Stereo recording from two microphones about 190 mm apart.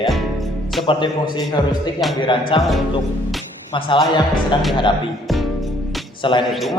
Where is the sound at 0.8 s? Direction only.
30° left (ahead or behind).